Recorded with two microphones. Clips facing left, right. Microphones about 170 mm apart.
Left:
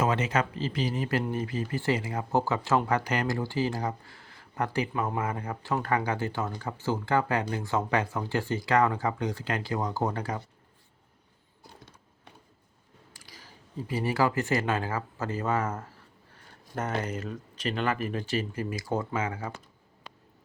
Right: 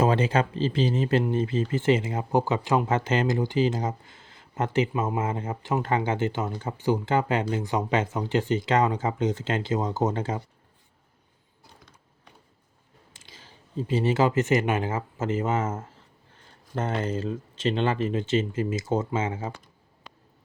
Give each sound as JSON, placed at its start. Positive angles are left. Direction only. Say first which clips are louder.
{"t": 0.0, "sound": "speech", "louder": "right 4 dB", "side_deg": -30}
{"t": 13.1, "sound": "speech", "louder": "right 1 dB", "side_deg": -25}